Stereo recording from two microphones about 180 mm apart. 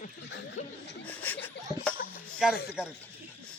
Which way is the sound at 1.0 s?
10° left (ahead or behind).